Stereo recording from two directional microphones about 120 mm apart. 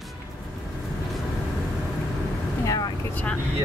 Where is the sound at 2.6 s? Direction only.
30° left (ahead or behind).